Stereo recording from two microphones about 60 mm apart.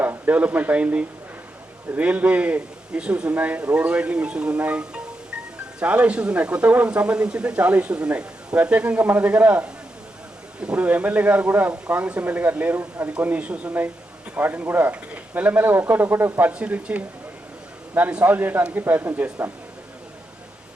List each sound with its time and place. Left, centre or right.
0.3 s speech: right
16.5 s speech: right